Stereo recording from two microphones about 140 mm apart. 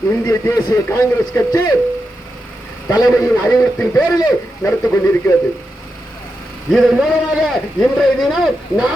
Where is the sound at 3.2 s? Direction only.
20° left (ahead or behind).